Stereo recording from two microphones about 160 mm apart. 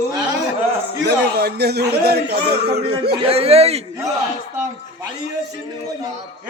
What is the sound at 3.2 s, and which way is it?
Speech, 40° right (ahead or behind).